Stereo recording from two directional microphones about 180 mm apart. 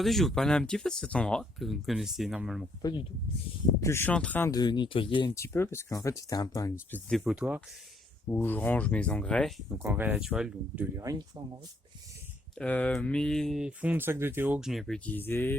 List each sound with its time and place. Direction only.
0.0 s speech: centre (ahead or behind)
3.8 s speech: 15° left (ahead or behind)
5.3 s speech: 15° left (ahead or behind)
7.1 s speech: 5° right (ahead or behind)
8.3 s speech: 10° left (ahead or behind)
9.8 s speech: 10° right (ahead or behind)
10.9 s speech: 20° right (ahead or behind)
12.5 s speech: 10° left (ahead or behind)